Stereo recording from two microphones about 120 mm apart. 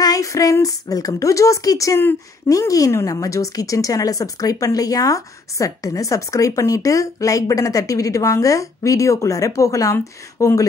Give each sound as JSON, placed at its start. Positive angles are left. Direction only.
{"t": 0.0, "sound": "a woman's voice", "side_deg": 30}